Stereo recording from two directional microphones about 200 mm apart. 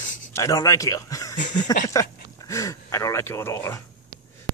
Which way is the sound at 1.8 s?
15° left (ahead or behind).